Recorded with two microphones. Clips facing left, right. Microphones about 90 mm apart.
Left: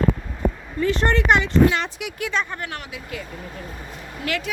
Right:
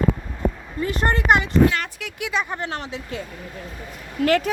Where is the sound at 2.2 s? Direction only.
5° right (ahead or behind).